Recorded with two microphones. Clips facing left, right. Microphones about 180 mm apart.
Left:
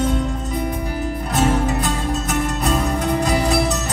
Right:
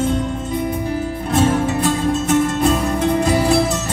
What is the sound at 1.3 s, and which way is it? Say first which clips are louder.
Music: right 3 dB; 30° right (ahead or behind).